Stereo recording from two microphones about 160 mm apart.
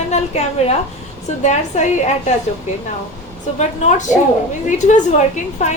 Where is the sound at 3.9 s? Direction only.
50° left (ahead or behind).